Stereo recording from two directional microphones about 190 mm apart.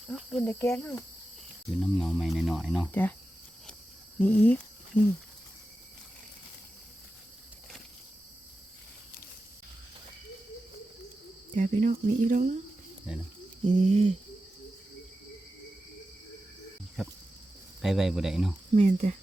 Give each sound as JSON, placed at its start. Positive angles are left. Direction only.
{"t": 0.1, "sound": "speech", "side_deg": 0}
{"t": 1.8, "sound": "speech", "side_deg": 0}
{"t": 2.9, "sound": "speech", "side_deg": 10}
{"t": 4.2, "sound": "speech", "side_deg": 10}
{"t": 11.5, "sound": "speech", "side_deg": -40}
{"t": 13.1, "sound": "speech", "side_deg": -5}
{"t": 13.7, "sound": "speech", "side_deg": -35}
{"t": 17.8, "sound": "speech", "side_deg": 0}
{"t": 18.7, "sound": "speech", "side_deg": -35}